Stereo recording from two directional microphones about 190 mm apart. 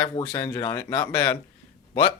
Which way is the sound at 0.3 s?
15° left (ahead or behind).